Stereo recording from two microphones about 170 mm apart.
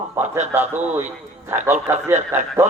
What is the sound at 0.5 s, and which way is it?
Speech, 15° right (ahead or behind).